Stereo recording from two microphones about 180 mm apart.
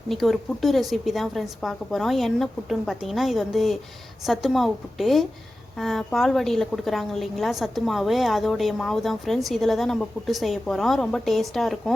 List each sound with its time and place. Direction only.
0.1 s a woman's voice: centre (ahead or behind)